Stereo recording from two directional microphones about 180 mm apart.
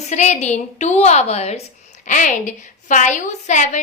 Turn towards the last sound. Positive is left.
turn(degrees=40)  # may be behind; listen again after turning